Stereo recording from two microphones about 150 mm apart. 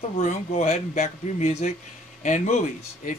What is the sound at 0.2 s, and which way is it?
Speech, 50° left (ahead or behind).